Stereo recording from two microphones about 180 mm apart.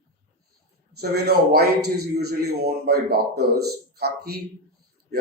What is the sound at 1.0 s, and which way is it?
A man's voice, 60° right (ahead or behind).